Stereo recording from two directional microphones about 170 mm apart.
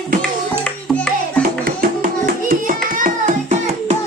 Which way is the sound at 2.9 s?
50° right (ahead or behind).